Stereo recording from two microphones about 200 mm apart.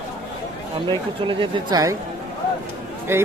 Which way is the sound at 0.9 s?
25° right (ahead or behind).